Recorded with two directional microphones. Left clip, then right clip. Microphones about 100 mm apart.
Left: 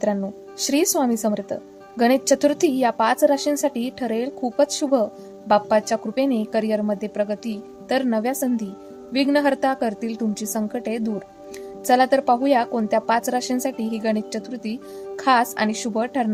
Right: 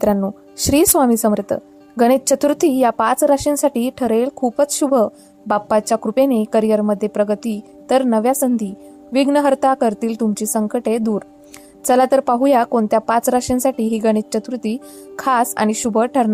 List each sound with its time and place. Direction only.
0.6 s a woman's voice: 50° right (ahead or behind)